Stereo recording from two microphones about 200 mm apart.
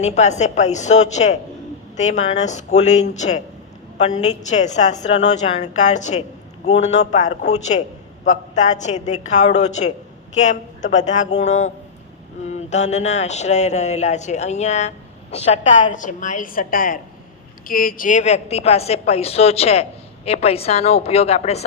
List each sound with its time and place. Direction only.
0.0 s a woman's voice: 35° left (ahead or behind)